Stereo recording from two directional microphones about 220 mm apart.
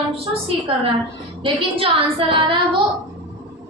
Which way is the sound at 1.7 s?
25° right (ahead or behind).